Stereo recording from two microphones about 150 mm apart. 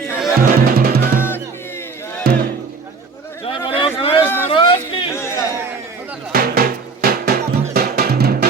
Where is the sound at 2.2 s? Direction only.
90° right.